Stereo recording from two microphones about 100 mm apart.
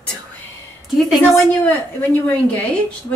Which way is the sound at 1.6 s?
15° left (ahead or behind).